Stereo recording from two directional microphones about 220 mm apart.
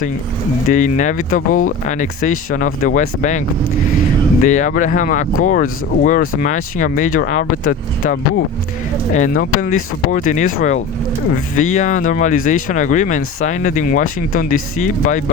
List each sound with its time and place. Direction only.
0.7 s speech: 35° left (ahead or behind)
4.4 s speech: 35° left (ahead or behind)